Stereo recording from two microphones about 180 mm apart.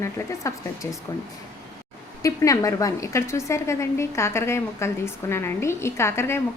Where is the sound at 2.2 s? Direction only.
20° left (ahead or behind).